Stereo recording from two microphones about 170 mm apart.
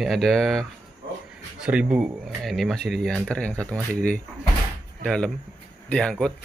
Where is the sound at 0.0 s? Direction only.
Centre (ahead or behind).